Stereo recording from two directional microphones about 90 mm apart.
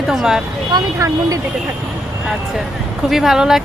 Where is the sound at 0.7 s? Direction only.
50° right (ahead or behind).